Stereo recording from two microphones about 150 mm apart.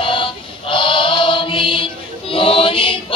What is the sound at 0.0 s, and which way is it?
Music, 35° left (ahead or behind).